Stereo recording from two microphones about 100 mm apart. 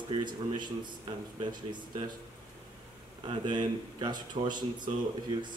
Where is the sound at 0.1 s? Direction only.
50° right (ahead or behind).